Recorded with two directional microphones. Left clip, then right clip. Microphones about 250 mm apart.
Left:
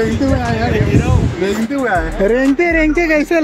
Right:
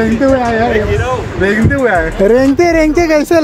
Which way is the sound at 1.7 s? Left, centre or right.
Centre.